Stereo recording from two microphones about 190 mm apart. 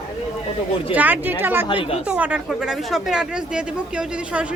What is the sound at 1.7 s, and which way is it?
Speech, 25° left (ahead or behind).